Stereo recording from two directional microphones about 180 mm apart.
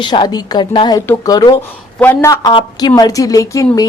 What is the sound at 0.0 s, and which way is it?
A woman's voice, 25° left (ahead or behind).